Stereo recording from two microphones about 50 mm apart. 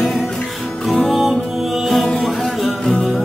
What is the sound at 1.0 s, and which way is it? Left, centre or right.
Music, centre.